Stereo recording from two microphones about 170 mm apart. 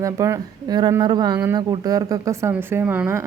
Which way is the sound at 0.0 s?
20° right (ahead or behind).